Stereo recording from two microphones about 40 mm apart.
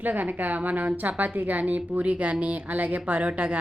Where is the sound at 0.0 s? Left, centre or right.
Right.